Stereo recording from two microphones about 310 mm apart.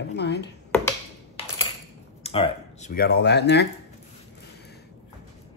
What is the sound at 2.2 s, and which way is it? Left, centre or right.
Speech, centre.